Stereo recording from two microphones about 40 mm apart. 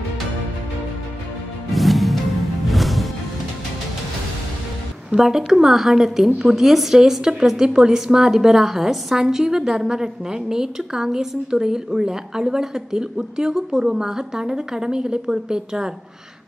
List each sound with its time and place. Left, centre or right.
1.7 s music: centre
5.1 s a woman's voice: centre